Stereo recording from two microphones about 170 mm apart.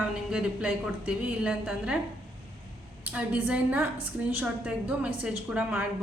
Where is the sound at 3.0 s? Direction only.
10° right (ahead or behind).